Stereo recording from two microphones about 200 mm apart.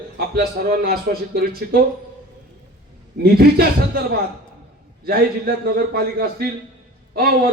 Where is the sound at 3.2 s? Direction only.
50° right (ahead or behind).